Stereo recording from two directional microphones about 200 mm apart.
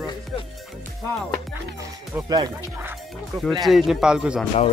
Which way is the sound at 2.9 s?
Centre (ahead or behind).